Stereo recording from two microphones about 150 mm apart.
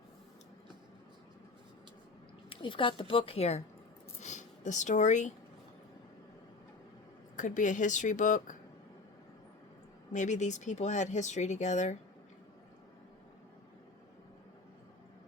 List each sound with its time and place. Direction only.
2.5 s a woman's voice: 35° left (ahead or behind)
4.2 s a sound: 50° left (ahead or behind)
7.3 s speech: 55° left (ahead or behind)
10.1 s speech: 55° left (ahead or behind)